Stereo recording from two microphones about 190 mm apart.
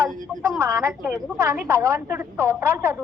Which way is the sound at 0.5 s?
15° right (ahead or behind).